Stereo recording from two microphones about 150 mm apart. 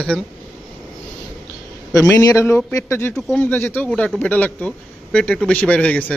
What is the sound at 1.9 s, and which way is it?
A man's voice, 20° left (ahead or behind).